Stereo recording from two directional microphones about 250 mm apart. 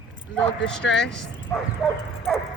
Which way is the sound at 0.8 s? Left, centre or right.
Left.